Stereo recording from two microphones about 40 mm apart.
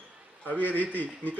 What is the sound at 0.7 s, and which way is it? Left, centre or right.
Speech, left.